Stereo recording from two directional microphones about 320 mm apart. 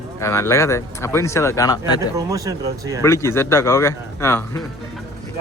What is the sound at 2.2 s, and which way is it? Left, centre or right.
Speech, centre.